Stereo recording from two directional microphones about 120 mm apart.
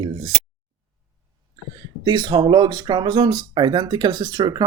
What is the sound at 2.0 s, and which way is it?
Speech, 35° right (ahead or behind).